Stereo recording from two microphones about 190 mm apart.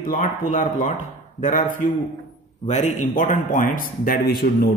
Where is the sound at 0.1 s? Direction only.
45° left (ahead or behind).